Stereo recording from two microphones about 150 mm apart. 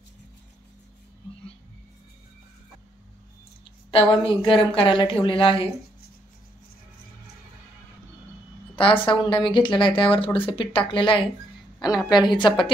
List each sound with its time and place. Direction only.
3.9 s speech: 35° left (ahead or behind)
8.7 s speech: 35° left (ahead or behind)